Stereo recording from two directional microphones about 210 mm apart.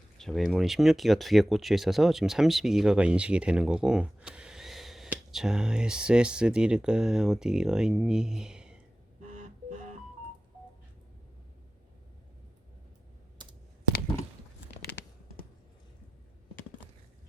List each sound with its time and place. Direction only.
0.2 s speech: centre (ahead or behind)
9.3 s telephone dialing: 35° right (ahead or behind)
13.4 s computer keyboard: 20° right (ahead or behind)